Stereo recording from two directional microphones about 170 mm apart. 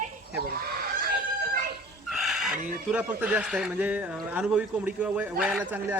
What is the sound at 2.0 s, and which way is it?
Speech, centre (ahead or behind).